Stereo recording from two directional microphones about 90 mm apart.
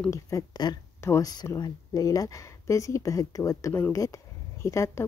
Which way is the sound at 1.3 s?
50° left (ahead or behind).